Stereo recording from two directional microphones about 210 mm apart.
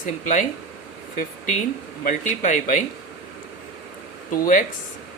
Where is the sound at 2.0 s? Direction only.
40° left (ahead or behind).